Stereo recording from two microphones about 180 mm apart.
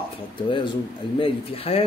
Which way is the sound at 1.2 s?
30° left (ahead or behind).